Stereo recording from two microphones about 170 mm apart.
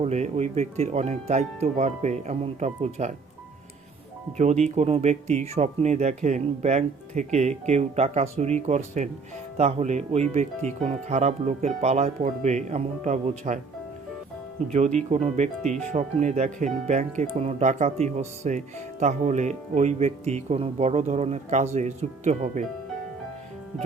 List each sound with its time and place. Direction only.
0.0 s speech: 40° right (ahead or behind)
4.4 s speech: 40° right (ahead or behind)
14.7 s speech: 40° right (ahead or behind)